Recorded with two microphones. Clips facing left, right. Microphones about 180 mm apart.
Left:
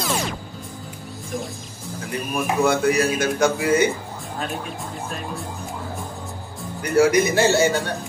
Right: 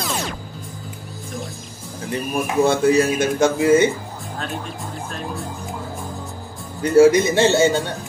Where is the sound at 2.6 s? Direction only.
25° right (ahead or behind).